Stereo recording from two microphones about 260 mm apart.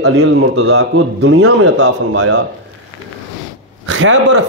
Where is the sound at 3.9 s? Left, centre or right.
Right.